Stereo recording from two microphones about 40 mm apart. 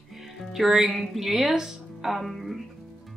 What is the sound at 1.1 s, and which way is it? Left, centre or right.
Speech, centre.